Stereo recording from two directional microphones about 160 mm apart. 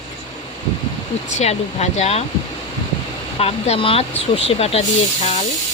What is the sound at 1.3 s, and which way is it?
Speech, 45° left (ahead or behind).